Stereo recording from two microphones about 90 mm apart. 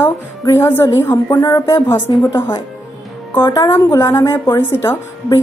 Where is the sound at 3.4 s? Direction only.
45° left (ahead or behind).